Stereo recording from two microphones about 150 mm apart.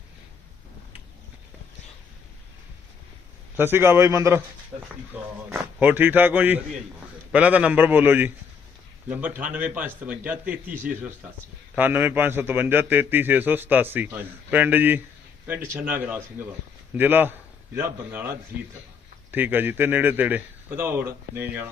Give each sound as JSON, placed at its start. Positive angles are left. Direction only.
{"t": 3.6, "sound": "a man's voice", "side_deg": -15}
{"t": 11.8, "sound": "a man's voice", "side_deg": -15}